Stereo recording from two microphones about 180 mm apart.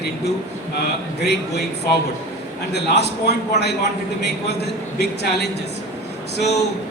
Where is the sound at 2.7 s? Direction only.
65° left (ahead or behind).